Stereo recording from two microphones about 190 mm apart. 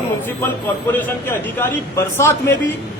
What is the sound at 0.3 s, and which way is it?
Speech, 10° left (ahead or behind).